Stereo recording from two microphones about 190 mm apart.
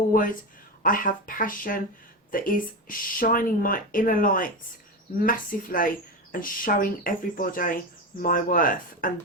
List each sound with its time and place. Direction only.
0.1 s speech: 45° left (ahead or behind)